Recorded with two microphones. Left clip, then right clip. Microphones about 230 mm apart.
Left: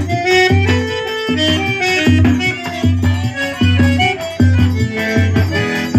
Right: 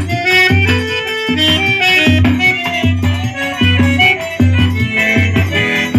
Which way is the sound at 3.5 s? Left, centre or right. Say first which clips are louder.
Right 4 dB; centre.